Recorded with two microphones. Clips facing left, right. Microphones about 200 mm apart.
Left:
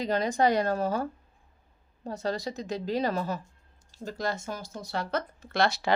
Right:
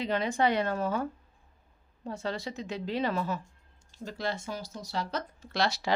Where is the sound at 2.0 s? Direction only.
40° left (ahead or behind).